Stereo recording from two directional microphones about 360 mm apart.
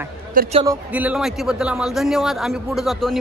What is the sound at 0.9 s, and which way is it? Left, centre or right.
A man's voice, centre.